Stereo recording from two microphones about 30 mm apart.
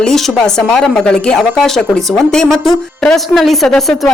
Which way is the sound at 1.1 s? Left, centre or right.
Left.